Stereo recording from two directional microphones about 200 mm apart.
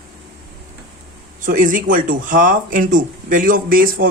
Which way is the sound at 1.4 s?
40° right (ahead or behind).